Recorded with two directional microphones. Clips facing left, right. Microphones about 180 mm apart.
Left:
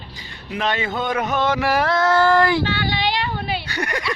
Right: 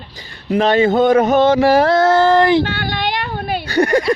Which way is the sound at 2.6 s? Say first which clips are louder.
Right 1 dB; 50° right (ahead or behind).